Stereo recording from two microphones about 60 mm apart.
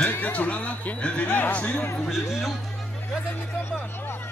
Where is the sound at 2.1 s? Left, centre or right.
Centre.